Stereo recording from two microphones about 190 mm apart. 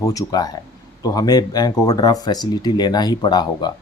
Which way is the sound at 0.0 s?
20° left (ahead or behind).